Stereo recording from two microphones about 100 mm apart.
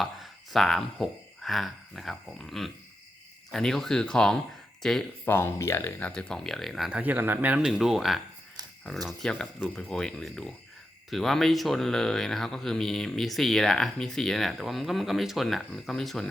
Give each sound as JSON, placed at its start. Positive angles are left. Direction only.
{"t": 0.0, "sound": "speech", "side_deg": 0}
{"t": 5.2, "sound": "speech", "side_deg": 20}
{"t": 6.1, "sound": "speech", "side_deg": 10}
{"t": 7.0, "sound": "speech", "side_deg": -20}
{"t": 7.7, "sound": "speech", "side_deg": -5}